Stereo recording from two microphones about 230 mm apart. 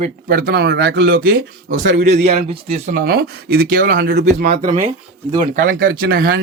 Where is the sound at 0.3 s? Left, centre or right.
Right.